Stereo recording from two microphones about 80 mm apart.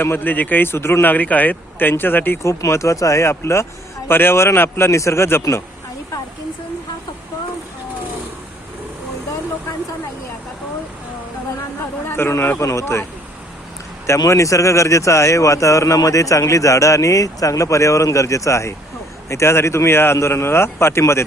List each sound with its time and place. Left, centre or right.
0.0 s speech: left
2.4 s speech: left
12.0 s speech: left
14.3 s speech: left